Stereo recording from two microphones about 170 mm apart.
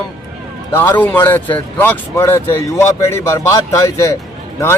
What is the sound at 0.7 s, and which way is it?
Speech, 15° left (ahead or behind).